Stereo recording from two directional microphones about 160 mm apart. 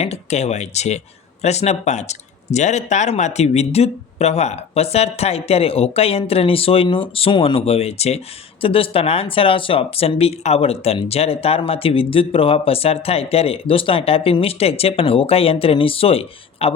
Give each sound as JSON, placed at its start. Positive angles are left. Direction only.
{"t": 0.0, "sound": "speech", "side_deg": 40}